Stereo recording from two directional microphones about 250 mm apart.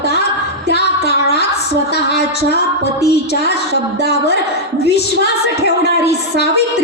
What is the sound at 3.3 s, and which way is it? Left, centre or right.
A woman's voice, left.